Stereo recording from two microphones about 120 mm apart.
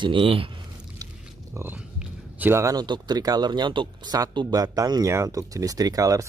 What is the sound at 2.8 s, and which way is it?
Speech, 35° right (ahead or behind).